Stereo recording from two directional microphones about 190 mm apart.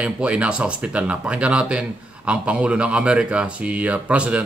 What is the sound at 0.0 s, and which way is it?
Speech, 5° right (ahead or behind).